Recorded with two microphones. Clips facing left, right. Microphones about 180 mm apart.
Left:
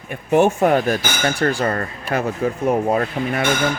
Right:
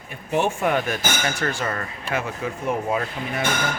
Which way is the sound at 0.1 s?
55° left (ahead or behind).